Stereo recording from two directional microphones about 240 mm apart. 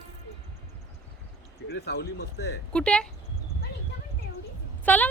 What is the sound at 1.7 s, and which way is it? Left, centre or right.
Speech, left.